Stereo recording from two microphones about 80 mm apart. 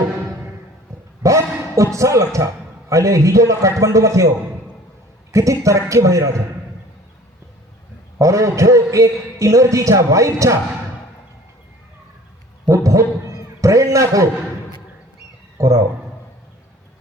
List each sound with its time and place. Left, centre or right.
1.2 s a man's voice: right
5.3 s a man's voice: right
8.2 s a man's voice: right
12.6 s speech: right
15.5 s speech: right